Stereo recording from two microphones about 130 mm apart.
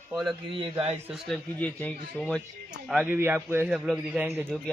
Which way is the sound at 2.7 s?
10° right (ahead or behind).